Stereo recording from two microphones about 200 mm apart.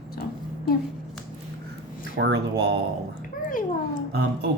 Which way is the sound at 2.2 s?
55° right (ahead or behind).